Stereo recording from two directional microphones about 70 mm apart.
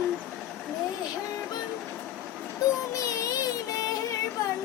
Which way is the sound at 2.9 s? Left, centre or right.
Left.